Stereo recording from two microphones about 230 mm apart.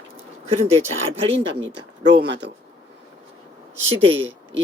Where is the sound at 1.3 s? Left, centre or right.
Right.